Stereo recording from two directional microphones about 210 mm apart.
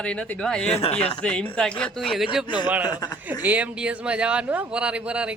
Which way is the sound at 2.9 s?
20° left (ahead or behind).